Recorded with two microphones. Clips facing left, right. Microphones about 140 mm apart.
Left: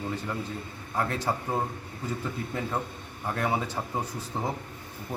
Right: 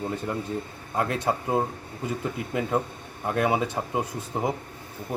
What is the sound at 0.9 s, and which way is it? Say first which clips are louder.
A man's voice: right 3 dB; 20° right (ahead or behind).